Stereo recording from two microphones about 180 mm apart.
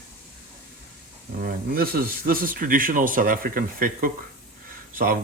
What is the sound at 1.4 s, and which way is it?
Speech, 55° right (ahead or behind).